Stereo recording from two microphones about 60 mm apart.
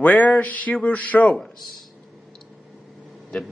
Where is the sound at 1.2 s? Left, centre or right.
Centre.